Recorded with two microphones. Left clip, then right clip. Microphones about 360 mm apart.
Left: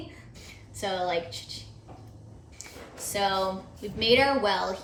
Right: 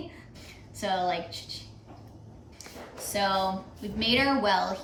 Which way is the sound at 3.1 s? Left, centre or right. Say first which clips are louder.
Even; centre.